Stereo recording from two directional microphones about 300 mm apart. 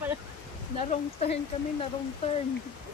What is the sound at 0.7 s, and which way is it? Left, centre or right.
Speech, left.